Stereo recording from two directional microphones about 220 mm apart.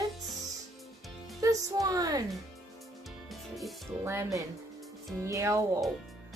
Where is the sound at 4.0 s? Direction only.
10° right (ahead or behind).